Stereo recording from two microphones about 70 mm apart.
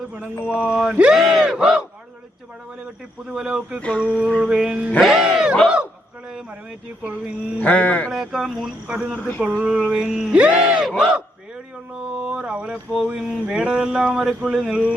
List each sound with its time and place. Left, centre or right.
0.6 s speech: centre
5.6 s battle cry: centre
7.6 s music: centre
8.1 s speech: centre
9.1 s music: left
9.4 s speech: centre
12.1 s a sound: centre
13.1 s speech: centre